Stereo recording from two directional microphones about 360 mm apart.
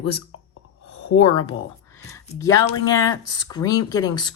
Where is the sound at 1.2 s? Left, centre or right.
Centre.